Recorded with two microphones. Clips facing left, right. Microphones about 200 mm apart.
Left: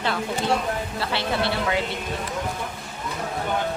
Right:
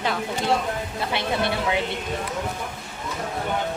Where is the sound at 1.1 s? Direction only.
20° right (ahead or behind).